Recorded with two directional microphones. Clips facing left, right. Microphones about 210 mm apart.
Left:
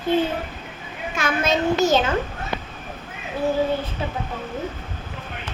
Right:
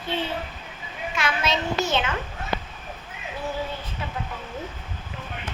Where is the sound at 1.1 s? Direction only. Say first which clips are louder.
Left 4 dB; 50° left (ahead or behind).